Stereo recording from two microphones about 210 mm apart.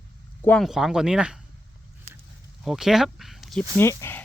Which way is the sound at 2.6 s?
Centre (ahead or behind).